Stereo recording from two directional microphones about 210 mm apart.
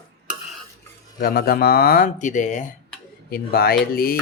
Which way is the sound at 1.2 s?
45° left (ahead or behind).